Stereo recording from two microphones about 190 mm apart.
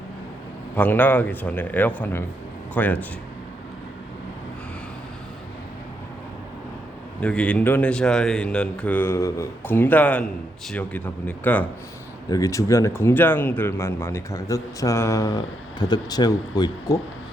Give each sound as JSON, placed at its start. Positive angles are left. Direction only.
{"t": 0.8, "sound": "speech", "side_deg": 10}
{"t": 7.2, "sound": "speech", "side_deg": 5}